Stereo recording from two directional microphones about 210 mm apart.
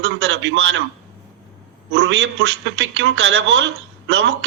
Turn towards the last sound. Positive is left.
turn(degrees=-60)  # may be behind; listen again after turning